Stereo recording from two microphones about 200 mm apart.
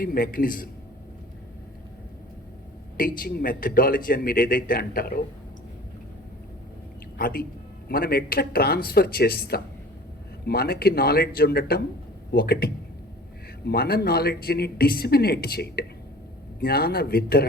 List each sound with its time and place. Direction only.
0.0 s speech: 45° left (ahead or behind)
3.0 s speech: 45° left (ahead or behind)
7.2 s speech: 45° left (ahead or behind)